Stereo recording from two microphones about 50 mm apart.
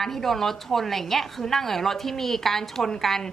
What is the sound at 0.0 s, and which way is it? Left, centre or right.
A woman's voice, centre.